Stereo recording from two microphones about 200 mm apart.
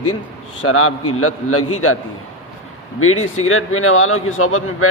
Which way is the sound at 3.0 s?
90° left.